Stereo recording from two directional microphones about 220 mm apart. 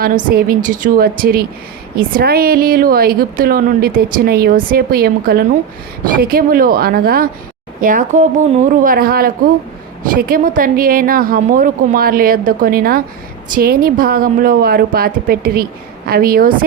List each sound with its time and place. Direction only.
0.0 s a woman's voice: 40° right (ahead or behind)